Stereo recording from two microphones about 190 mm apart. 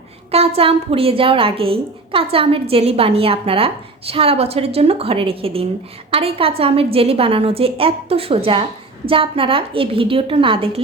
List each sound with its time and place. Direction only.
0.3 s a woman's voice: 30° right (ahead or behind)